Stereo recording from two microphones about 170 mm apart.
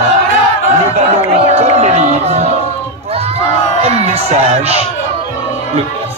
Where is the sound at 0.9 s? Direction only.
40° right (ahead or behind).